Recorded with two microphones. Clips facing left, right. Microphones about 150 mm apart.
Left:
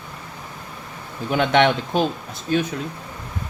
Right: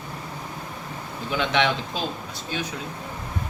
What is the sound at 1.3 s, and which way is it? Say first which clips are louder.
Speech: left 6 dB; 55° left (ahead or behind).